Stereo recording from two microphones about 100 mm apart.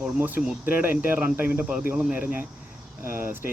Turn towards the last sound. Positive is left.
turn(degrees=-20)  # may be behind; listen again after turning